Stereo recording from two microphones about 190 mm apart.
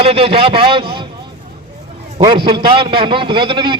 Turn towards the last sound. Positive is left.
turn(degrees=-25)  # may be behind; listen again after turning